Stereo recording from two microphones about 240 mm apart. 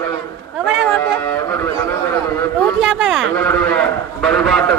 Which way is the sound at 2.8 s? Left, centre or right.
Centre.